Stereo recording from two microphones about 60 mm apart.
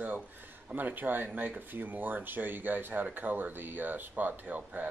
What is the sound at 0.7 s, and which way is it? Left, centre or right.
Speech, right.